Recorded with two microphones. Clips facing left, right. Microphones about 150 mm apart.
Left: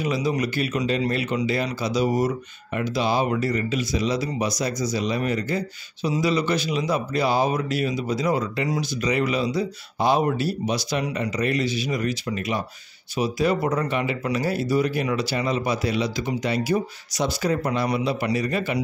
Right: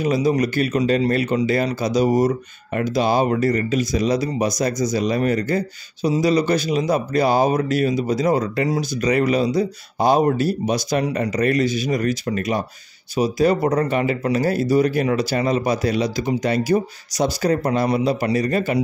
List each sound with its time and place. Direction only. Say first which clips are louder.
0.0 s speech: right 5 dB; 45° right (ahead or behind)